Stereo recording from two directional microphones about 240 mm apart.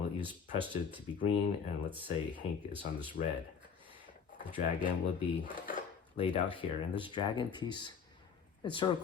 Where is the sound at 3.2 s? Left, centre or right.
Left.